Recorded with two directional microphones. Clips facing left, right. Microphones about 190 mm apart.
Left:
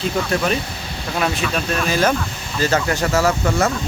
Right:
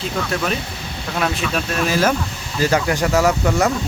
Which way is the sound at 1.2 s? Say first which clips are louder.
Even; centre (ahead or behind).